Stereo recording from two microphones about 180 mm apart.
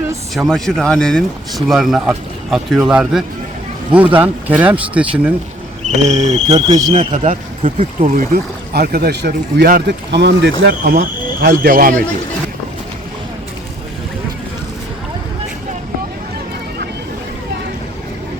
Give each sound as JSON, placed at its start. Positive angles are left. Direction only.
{"t": 0.3, "sound": "speech", "side_deg": 0}
{"t": 6.0, "sound": "speech", "side_deg": -40}
{"t": 6.7, "sound": "speech", "side_deg": -25}
{"t": 6.9, "sound": "speech", "side_deg": -40}
{"t": 8.1, "sound": "speech", "side_deg": -50}